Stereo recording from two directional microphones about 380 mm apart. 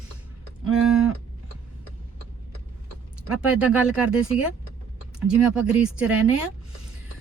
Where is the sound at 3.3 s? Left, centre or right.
Centre.